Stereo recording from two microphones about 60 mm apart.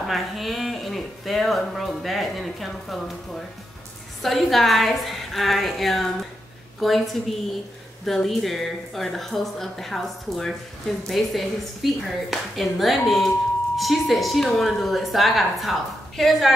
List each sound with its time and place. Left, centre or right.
0.0 s speech: centre
8.0 s speech: centre